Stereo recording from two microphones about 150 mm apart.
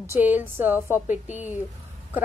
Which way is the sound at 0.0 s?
15° right (ahead or behind).